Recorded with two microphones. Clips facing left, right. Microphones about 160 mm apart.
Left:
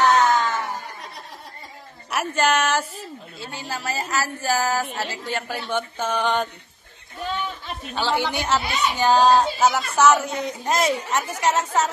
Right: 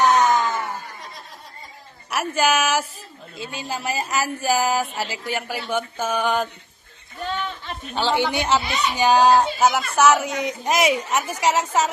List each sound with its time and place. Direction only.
0.0 s wail: 15° right (ahead or behind)
2.0 s a woman's voice: 5° right (ahead or behind)
3.3 s speech: 15° right (ahead or behind)
7.2 s a sound: 5° left (ahead or behind)
7.9 s speech: 20° right (ahead or behind)